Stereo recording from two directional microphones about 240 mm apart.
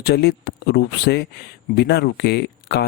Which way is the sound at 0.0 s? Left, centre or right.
Left.